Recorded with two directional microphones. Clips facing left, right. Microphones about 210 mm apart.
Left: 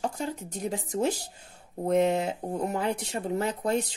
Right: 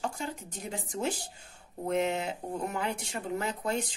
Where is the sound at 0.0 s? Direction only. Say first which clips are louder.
Left 4 dB; 40° left (ahead or behind).